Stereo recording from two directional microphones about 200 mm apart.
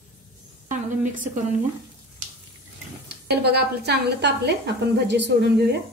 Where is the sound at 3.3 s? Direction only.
55° right (ahead or behind).